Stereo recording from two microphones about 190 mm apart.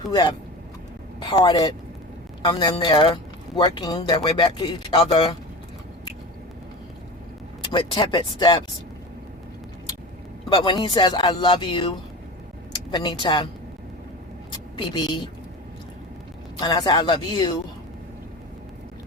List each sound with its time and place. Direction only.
0.0 s speech: 25° left (ahead or behind)
7.7 s speech: 25° left (ahead or behind)
10.5 s speech: 25° left (ahead or behind)
12.9 s speech: 25° left (ahead or behind)
14.8 s speech: 25° left (ahead or behind)
16.6 s speech: 20° left (ahead or behind)